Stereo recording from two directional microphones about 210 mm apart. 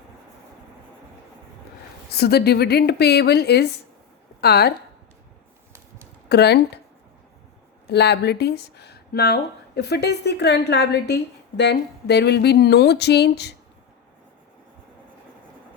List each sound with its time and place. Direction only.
2.1 s speech: 50° left (ahead or behind)
6.2 s speech: 50° left (ahead or behind)
7.9 s speech: 50° left (ahead or behind)